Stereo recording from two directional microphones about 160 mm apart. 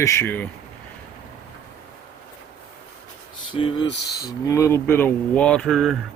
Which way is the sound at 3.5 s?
35° left (ahead or behind).